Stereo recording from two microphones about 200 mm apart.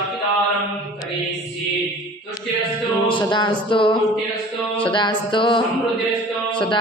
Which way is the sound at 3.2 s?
20° left (ahead or behind).